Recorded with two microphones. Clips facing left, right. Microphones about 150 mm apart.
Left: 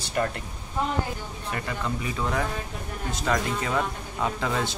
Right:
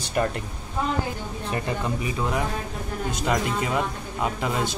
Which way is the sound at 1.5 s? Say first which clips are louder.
Right 3 dB; 25° right (ahead or behind).